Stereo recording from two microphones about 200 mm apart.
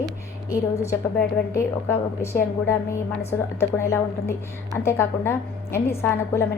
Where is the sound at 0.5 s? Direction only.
15° left (ahead or behind).